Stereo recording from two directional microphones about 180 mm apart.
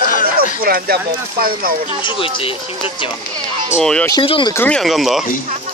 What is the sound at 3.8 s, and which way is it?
Speech, 5° left (ahead or behind).